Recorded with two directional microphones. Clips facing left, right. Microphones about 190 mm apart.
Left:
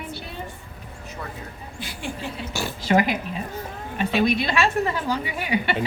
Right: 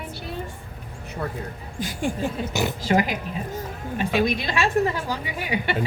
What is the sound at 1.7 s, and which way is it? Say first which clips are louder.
A woman's voice: right 7 dB; 45° right (ahead or behind).